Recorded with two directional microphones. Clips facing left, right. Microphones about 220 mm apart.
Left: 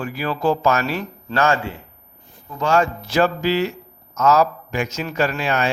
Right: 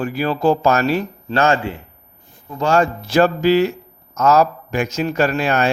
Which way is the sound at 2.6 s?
35° right (ahead or behind).